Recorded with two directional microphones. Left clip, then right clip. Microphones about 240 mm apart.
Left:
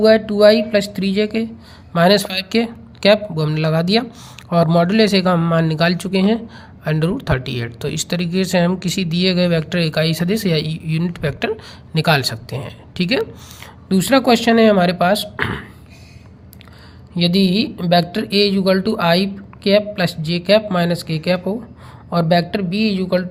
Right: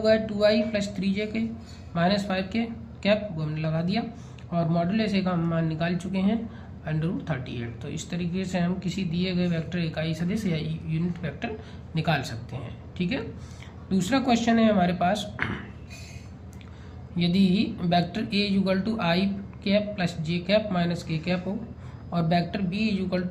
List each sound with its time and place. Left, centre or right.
0.0 s speech: left
17.2 s speech: left